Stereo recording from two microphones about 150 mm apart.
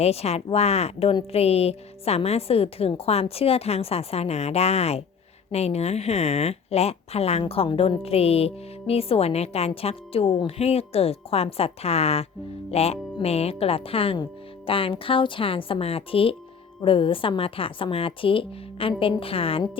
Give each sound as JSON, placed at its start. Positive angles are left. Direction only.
{"t": 0.0, "sound": "a woman's voice", "side_deg": 45}